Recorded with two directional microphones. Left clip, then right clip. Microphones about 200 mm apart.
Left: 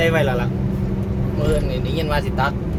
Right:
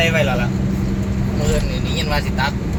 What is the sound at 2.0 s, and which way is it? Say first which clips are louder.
Speech: even; 20° left (ahead or behind).